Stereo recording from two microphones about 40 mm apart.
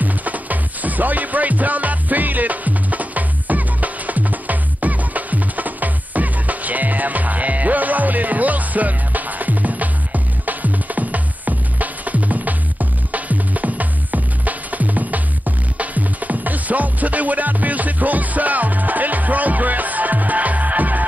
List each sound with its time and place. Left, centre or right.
0.0 s music: right